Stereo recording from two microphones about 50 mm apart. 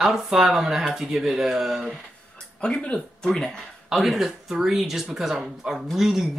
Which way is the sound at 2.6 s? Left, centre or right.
Centre.